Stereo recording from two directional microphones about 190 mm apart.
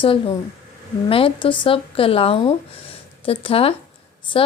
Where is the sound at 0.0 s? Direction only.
25° left (ahead or behind).